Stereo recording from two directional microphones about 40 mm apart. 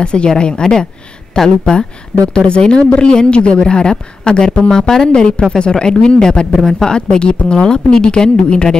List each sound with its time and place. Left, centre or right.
0.0 s speech: left